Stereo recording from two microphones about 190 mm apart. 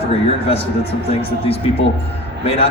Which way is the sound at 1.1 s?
30° left (ahead or behind).